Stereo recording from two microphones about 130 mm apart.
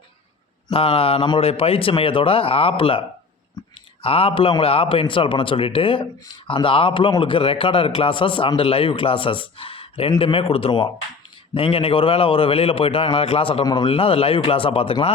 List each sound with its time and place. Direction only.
0.7 s a man's voice: 45° left (ahead or behind)
3.6 s clicking: 35° left (ahead or behind)
4.0 s a man's voice: 45° left (ahead or behind)